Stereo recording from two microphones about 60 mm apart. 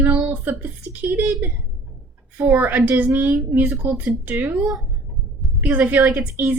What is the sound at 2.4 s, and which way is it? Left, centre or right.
Speech, right.